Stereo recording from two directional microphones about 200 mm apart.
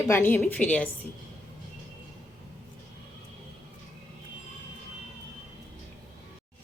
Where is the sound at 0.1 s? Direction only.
10° left (ahead or behind).